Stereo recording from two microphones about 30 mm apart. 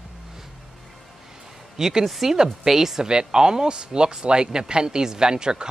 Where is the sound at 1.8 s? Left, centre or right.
Centre.